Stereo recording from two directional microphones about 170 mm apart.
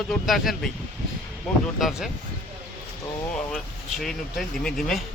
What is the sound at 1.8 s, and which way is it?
Speech, centre (ahead or behind).